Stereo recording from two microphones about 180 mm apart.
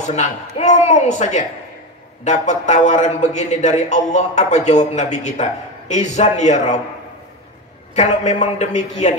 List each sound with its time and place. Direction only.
0.0 s a man's voice: 40° left (ahead or behind)
7.9 s a man's voice: 40° left (ahead or behind)